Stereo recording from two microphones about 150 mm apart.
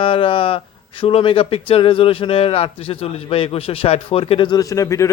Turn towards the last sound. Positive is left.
turn(degrees=20)  # may be behind; listen again after turning